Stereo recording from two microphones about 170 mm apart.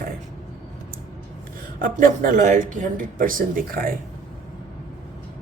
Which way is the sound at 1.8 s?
55° right (ahead or behind).